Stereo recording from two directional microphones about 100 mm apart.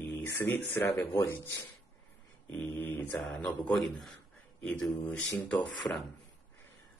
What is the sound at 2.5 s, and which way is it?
Speech, 20° left (ahead or behind).